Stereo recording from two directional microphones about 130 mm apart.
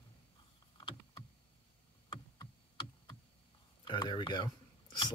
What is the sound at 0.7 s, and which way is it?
Rowboat, 35° left (ahead or behind).